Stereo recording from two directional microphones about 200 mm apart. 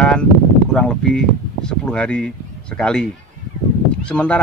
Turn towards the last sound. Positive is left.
turn(degrees=5)  # may be behind; listen again after turning